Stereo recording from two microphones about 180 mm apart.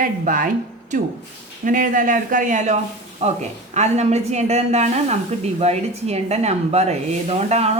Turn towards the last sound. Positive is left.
turn(degrees=-35)  # may be behind; listen again after turning